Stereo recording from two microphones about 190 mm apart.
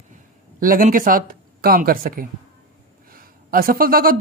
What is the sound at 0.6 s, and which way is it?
Speech, 45° right (ahead or behind).